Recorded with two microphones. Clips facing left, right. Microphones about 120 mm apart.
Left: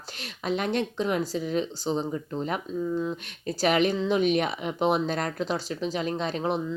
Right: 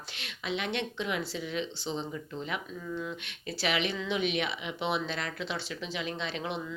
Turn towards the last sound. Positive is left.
turn(degrees=40)  # may be behind; listen again after turning